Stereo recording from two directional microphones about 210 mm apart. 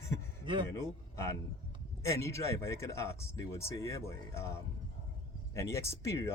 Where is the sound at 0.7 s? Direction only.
15° left (ahead or behind).